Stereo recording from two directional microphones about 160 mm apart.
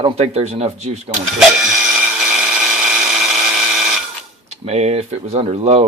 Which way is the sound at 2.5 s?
5° right (ahead or behind).